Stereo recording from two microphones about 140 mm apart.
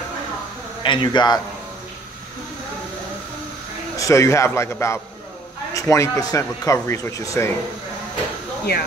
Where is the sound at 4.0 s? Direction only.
20° left (ahead or behind).